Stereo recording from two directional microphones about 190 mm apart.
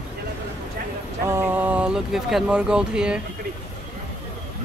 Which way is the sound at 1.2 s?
15° right (ahead or behind).